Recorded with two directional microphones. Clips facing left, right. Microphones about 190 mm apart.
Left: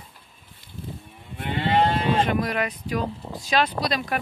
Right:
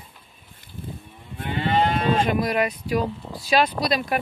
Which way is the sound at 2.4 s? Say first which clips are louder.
Right 3 dB; 10° right (ahead or behind).